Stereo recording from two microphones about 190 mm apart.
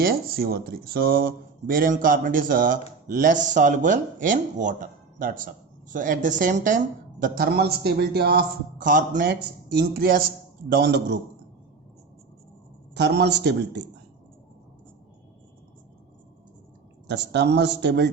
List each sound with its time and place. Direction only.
0.0 s speech: 50° right (ahead or behind)
9.3 s speech: 60° right (ahead or behind)
12.9 s speech: 60° right (ahead or behind)
17.1 s speech: 60° right (ahead or behind)